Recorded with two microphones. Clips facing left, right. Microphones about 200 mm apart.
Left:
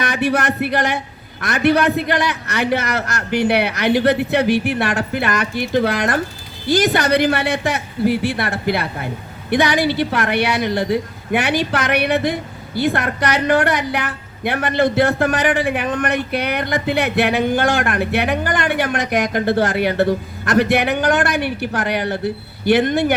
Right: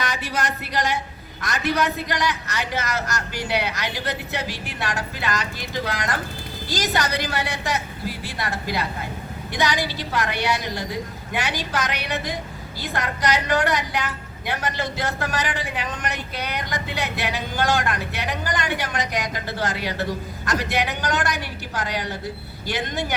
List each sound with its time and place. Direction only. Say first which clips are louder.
0.0 s a woman's voice: left 8 dB; 60° left (ahead or behind)